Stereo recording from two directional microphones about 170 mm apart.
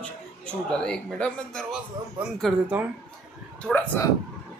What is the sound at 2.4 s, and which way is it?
Speech, 5° right (ahead or behind).